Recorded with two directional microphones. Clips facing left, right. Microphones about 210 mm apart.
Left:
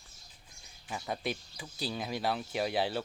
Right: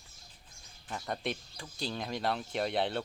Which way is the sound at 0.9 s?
5° left (ahead or behind).